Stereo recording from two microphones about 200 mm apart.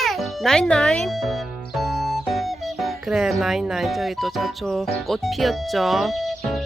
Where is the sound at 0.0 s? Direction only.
Centre (ahead or behind).